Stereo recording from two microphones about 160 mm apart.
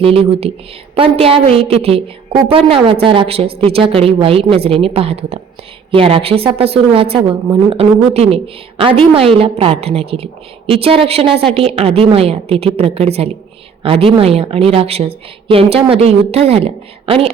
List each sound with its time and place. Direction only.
0.0 s a woman's voice: 35° right (ahead or behind)